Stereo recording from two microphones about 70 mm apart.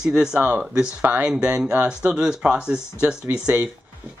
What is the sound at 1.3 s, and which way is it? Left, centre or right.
Speech, centre.